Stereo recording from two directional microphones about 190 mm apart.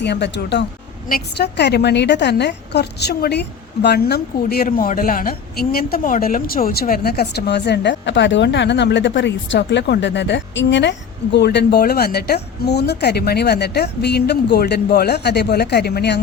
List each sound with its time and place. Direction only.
0.0 s a woman's voice: 65° left (ahead or behind)